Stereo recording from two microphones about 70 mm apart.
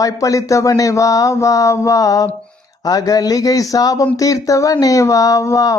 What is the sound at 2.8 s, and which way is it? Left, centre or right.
Mantra, left.